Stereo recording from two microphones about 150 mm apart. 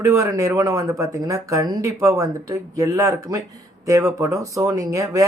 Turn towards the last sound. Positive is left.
turn(degrees=-20)  # may be behind; listen again after turning